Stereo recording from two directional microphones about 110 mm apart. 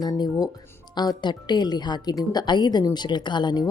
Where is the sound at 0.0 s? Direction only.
35° left (ahead or behind).